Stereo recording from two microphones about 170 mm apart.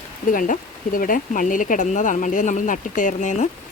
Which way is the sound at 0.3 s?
50° left (ahead or behind).